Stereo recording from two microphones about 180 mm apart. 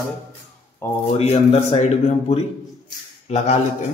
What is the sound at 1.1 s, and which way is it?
Speech, 35° left (ahead or behind).